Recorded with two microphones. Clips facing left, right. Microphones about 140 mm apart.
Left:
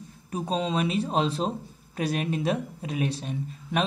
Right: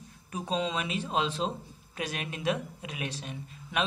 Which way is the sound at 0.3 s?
35° left (ahead or behind).